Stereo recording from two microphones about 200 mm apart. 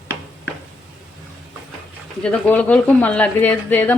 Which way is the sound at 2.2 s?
5° left (ahead or behind).